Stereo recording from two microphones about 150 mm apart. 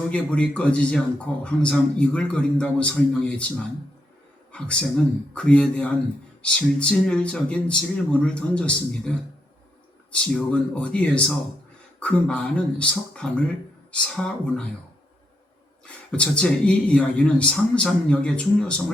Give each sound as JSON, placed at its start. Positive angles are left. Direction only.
{"t": 0.1, "sound": "speech", "side_deg": 5}
{"t": 4.5, "sound": "speech", "side_deg": 5}
{"t": 16.1, "sound": "speech", "side_deg": 5}